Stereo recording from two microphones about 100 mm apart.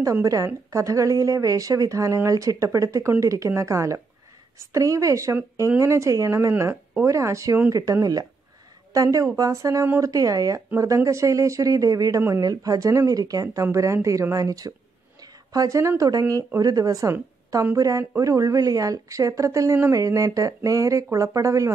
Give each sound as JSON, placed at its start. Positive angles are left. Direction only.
{"t": 0.0, "sound": "speech", "side_deg": -35}